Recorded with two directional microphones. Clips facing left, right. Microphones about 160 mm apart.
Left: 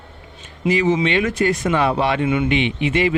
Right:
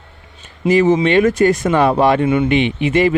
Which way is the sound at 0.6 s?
45° right (ahead or behind).